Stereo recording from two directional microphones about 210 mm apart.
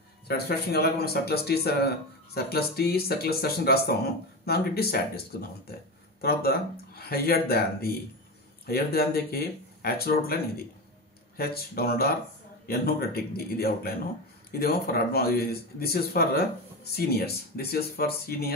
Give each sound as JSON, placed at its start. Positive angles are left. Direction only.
{"t": 0.3, "sound": "speech", "side_deg": 50}
{"t": 6.2, "sound": "speech", "side_deg": 45}